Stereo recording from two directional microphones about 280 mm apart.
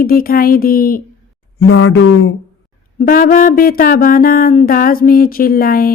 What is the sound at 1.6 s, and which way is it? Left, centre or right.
Speech, left.